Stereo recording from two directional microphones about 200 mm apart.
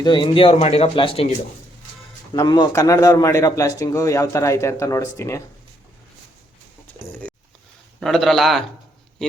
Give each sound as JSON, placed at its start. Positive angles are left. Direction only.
{"t": 0.0, "sound": "speech", "side_deg": 25}
{"t": 2.3, "sound": "speech", "side_deg": 20}
{"t": 7.9, "sound": "a man's voice", "side_deg": 0}